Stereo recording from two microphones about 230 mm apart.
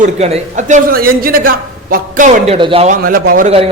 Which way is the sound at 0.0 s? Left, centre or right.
Right.